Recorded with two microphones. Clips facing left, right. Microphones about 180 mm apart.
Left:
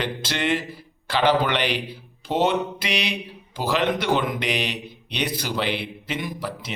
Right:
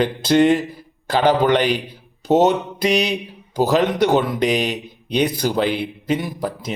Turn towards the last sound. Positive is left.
turn(degrees=-40)  # may be behind; listen again after turning